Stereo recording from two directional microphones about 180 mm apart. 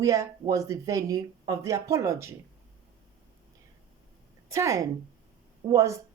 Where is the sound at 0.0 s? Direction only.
20° right (ahead or behind).